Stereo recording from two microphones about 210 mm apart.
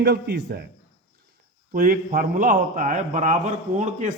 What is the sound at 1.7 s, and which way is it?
A man's voice, 45° right (ahead or behind).